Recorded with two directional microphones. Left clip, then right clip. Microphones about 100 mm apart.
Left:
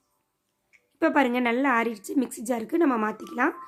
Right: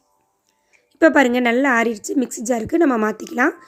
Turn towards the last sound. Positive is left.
turn(degrees=-50)  # may be behind; listen again after turning